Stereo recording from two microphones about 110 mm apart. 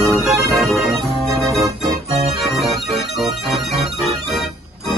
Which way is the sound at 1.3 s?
30° right (ahead or behind).